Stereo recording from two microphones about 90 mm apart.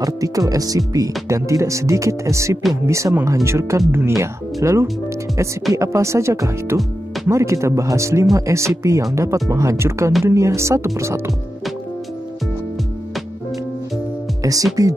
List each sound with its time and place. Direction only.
0.0 s speech: 40° right (ahead or behind)
14.4 s speech: 40° right (ahead or behind)